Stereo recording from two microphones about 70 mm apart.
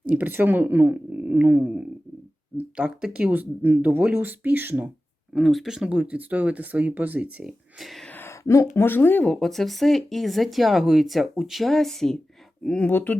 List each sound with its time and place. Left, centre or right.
0.0 s speech: right
5.3 s speech: centre
5.9 s speech: right
7.4 s speech: centre
8.0 s a sound: left
8.3 s speech: left
8.8 s speech: left
9.2 s speech: centre